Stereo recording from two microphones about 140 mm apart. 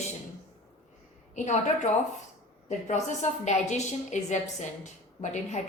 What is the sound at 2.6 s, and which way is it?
A woman's voice, 55° left (ahead or behind).